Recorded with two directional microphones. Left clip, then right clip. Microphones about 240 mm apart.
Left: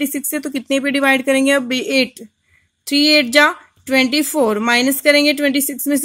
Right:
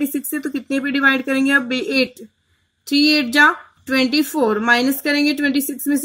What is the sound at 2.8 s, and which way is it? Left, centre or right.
Speech, left.